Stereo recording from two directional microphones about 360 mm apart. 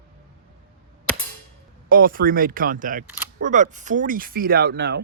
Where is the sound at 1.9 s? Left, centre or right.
Right.